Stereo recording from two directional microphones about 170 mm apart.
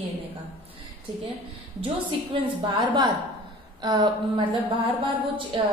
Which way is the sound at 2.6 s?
30° right (ahead or behind).